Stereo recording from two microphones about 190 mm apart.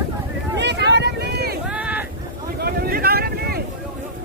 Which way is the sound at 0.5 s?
65° right (ahead or behind).